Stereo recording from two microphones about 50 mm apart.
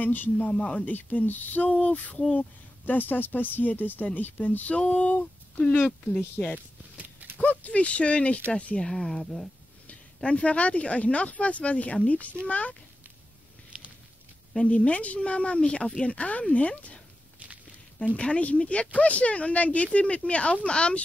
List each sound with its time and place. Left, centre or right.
0.0 s speech: left
0.5 s speech: left
6.4 s speech: centre
7.3 s speech: left
8.8 s speech: centre
9.8 s speech: left
14.6 s speech: left
18.1 s speech: left